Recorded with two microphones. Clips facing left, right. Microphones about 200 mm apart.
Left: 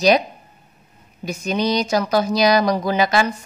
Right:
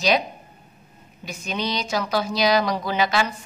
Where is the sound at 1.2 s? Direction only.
40° left (ahead or behind).